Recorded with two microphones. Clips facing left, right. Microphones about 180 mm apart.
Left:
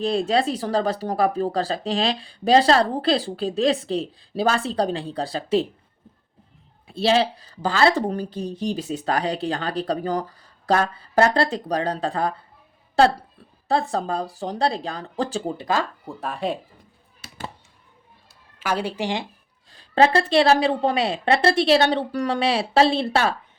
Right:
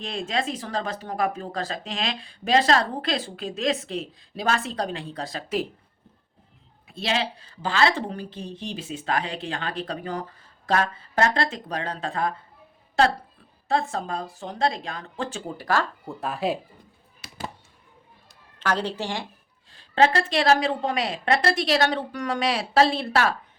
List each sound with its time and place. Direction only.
0.0 s speech: 35° left (ahead or behind)
6.8 s speech: 35° left (ahead or behind)
13.7 s speech: 35° left (ahead or behind)
15.5 s a woman's voice: 20° left (ahead or behind)
16.0 s speech: centre (ahead or behind)
18.6 s a woman's voice: 10° left (ahead or behind)
19.7 s a woman's voice: 35° left (ahead or behind)